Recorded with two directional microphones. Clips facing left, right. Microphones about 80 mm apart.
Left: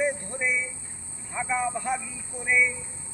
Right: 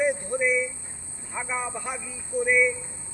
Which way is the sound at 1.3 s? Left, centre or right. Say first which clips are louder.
Left 3 dB; centre.